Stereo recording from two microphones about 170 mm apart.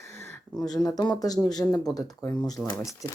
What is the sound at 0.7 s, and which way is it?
Speech, 20° left (ahead or behind).